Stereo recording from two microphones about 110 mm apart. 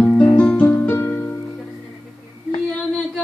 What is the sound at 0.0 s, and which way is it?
Music, 15° left (ahead or behind).